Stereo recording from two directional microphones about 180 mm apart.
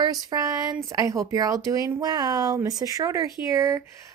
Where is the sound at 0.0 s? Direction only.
20° right (ahead or behind).